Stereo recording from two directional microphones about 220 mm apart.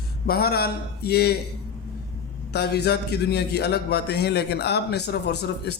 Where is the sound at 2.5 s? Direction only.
50° left (ahead or behind).